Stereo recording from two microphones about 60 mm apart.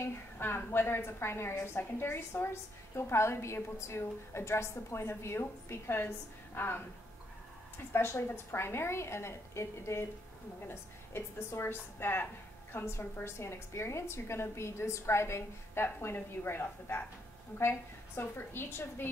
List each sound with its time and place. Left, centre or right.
0.0 s a woman's voice: left